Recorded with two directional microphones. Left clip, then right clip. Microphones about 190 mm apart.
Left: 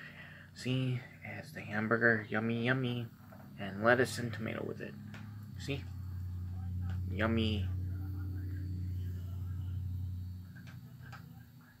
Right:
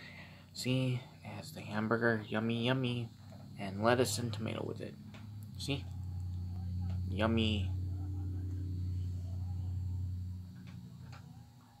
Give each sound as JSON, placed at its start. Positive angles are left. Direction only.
{"t": 0.6, "sound": "speech", "side_deg": -20}
{"t": 7.1, "sound": "speech", "side_deg": -20}